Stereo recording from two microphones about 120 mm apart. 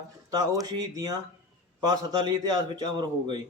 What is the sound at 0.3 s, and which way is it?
A man's voice, 30° right (ahead or behind).